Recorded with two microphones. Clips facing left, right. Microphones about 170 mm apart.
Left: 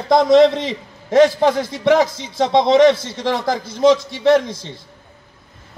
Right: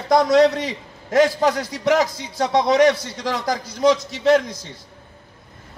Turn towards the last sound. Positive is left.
turn(degrees=25)  # may be behind; listen again after turning